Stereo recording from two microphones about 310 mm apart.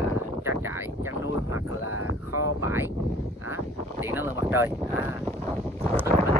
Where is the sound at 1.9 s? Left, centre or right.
Left.